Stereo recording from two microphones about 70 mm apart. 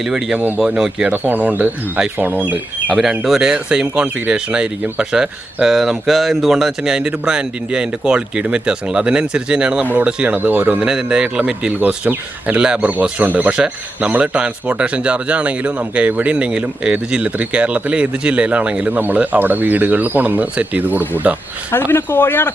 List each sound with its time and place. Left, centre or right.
0.0 s speech: centre
0.3 s speech: right
0.8 s speech: centre
1.1 s speech: right
2.9 s speech: centre; by 10.8 s right
10.8 s speech: centre
18.9 s speech: right
21.7 s speech: left